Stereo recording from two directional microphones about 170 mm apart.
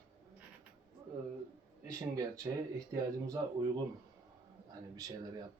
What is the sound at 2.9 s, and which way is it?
Speech, 20° right (ahead or behind).